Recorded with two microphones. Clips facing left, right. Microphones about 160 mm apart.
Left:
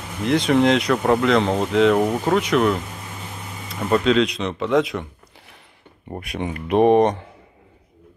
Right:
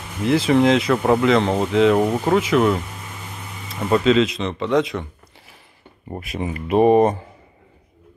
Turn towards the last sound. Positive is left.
turn(degrees=-5)  # may be behind; listen again after turning